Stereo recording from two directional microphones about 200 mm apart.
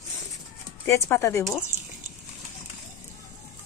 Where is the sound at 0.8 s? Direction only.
15° left (ahead or behind).